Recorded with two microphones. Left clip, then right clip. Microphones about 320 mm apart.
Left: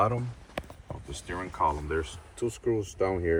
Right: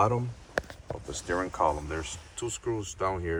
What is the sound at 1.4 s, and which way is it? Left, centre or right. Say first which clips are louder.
Speech: even; centre.